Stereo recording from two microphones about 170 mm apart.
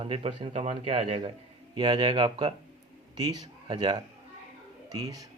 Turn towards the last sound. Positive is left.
turn(degrees=-20)  # may be behind; listen again after turning